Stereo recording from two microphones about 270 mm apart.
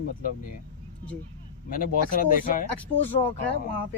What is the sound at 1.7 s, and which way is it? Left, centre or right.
Speech, left.